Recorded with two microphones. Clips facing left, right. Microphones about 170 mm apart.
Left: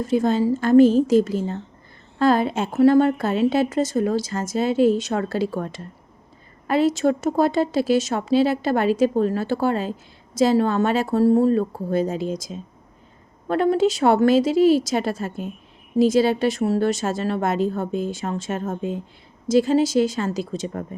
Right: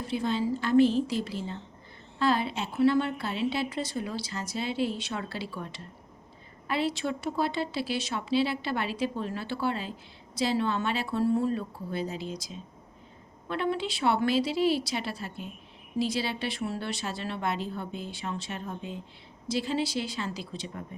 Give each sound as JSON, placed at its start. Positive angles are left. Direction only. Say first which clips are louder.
{"t": 0.0, "sound": "a woman's voice", "louder": "left 9 dB", "side_deg": 45}